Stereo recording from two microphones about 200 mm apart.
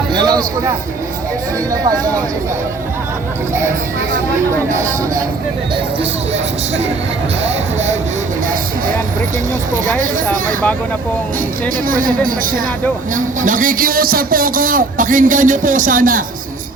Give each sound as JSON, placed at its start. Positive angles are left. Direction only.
{"t": 0.1, "sound": "a sound", "side_deg": -20}
{"t": 1.7, "sound": "speech", "side_deg": -15}
{"t": 7.4, "sound": "speech", "side_deg": -35}
{"t": 11.9, "sound": "a man's voice", "side_deg": -45}